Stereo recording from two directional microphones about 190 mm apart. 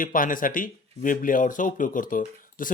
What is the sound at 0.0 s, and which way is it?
Speech, 45° left (ahead or behind).